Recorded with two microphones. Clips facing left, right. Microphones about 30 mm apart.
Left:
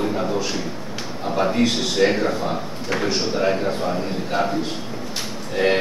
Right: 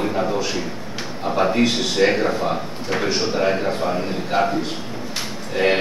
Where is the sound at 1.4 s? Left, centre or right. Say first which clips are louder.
Right 1 dB; centre.